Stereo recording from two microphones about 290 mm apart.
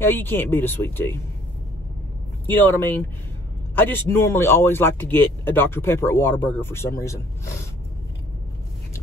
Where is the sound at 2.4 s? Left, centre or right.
Centre.